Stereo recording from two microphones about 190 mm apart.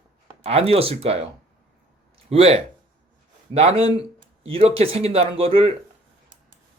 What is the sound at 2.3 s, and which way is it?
Speech, 30° right (ahead or behind).